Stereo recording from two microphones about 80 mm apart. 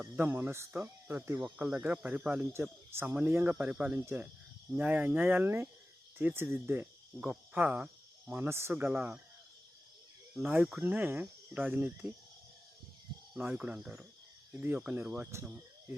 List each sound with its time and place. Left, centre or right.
0.0 s speech: right
1.5 s speech: centre
8.4 s speech: right
8.9 s speech: centre
10.4 s speech: right
13.5 s speech: centre
14.5 s speech: right
15.3 s speech: right